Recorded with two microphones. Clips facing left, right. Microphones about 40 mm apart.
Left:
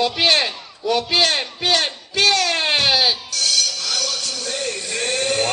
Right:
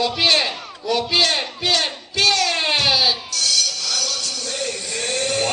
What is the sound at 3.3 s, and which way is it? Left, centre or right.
Music, centre.